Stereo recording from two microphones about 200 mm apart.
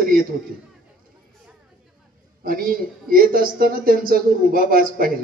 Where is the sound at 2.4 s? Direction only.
45° right (ahead or behind).